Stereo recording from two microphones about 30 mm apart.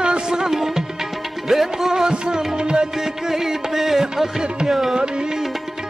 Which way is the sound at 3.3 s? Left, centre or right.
Centre.